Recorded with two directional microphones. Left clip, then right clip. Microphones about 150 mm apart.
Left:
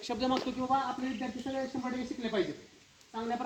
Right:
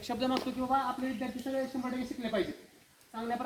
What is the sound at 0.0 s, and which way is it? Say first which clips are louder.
Speech: left 1 dB; 20° right (ahead or behind).